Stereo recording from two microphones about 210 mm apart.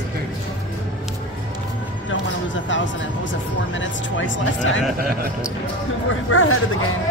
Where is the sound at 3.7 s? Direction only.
65° left (ahead or behind).